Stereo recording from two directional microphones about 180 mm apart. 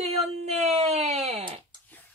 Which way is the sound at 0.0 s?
35° right (ahead or behind).